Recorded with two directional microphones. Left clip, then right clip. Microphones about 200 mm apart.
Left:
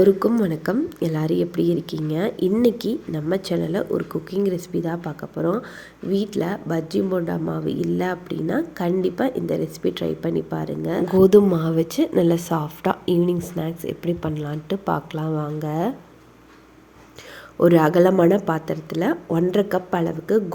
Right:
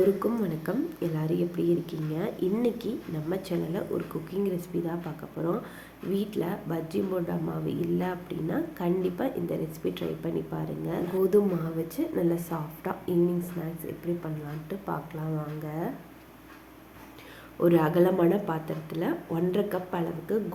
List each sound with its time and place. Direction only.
0.2 s speech: 35° left (ahead or behind)
17.6 s speech: 35° left (ahead or behind)